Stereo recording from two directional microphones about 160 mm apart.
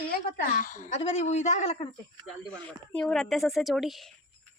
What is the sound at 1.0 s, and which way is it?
Speech, 40° left (ahead or behind).